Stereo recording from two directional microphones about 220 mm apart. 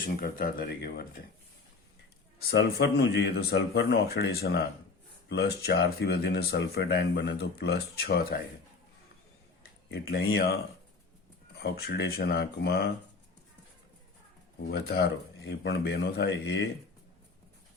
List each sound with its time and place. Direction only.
0.0 s speech: 40° left (ahead or behind)
2.5 s speech: 50° left (ahead or behind)
9.9 s speech: 45° left (ahead or behind)
11.6 s speech: 50° left (ahead or behind)
14.7 s speech: 45° left (ahead or behind)